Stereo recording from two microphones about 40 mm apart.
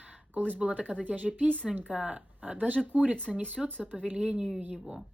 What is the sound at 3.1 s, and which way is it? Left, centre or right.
Speech, left.